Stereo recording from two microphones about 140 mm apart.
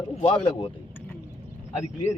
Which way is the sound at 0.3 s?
40° left (ahead or behind).